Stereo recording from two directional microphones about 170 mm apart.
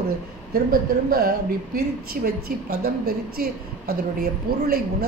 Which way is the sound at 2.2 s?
55° right (ahead or behind).